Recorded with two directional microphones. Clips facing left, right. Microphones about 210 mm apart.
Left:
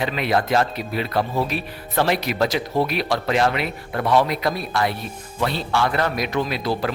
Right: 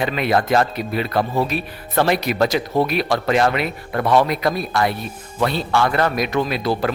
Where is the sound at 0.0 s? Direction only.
50° right (ahead or behind).